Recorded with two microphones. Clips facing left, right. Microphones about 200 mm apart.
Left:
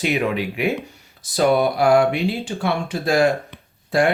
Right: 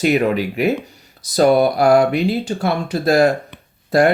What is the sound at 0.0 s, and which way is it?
Speech, 40° right (ahead or behind).